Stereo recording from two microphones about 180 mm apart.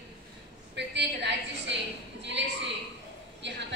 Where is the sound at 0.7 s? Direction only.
75° right (ahead or behind).